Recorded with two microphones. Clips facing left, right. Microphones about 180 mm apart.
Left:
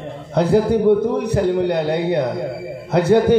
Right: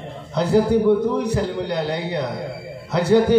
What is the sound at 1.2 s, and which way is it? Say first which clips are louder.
A man's voice: left 5 dB; 55° left (ahead or behind).